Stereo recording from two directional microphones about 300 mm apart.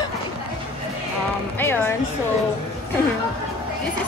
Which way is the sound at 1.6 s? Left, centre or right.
Centre.